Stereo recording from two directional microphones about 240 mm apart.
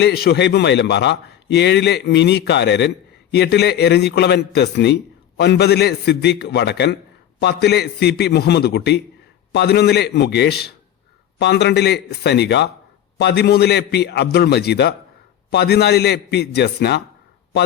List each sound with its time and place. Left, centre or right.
0.0 s a man's voice: left